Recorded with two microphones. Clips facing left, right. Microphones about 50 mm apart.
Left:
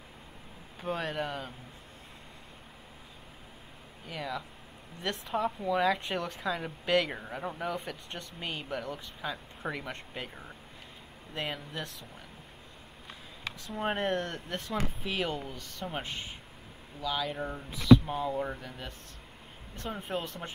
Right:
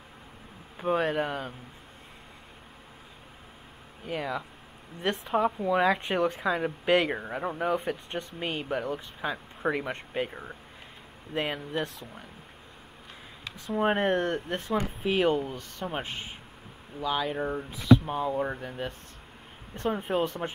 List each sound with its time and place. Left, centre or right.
0.7 s speech: centre
4.1 s speech: right
13.7 s speech: centre